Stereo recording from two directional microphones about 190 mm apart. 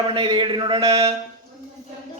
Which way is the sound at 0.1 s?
25° right (ahead or behind).